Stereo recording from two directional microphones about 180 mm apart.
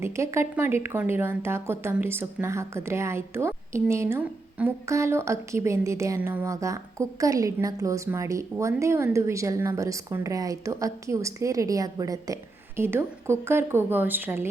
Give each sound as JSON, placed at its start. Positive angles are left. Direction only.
{"t": 0.0, "sound": "speech", "side_deg": -15}